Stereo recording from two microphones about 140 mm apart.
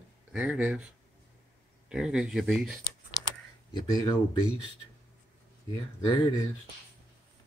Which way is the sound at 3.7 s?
25° left (ahead or behind).